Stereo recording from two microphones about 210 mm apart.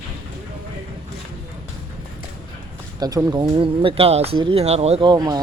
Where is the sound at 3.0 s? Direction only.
15° right (ahead or behind).